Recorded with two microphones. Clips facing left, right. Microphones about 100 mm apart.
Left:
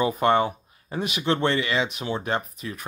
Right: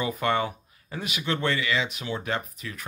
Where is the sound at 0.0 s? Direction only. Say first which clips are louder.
Left 5 dB; 30° left (ahead or behind).